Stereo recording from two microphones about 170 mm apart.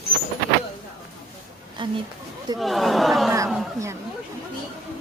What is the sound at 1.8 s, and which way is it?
Speech, 30° right (ahead or behind).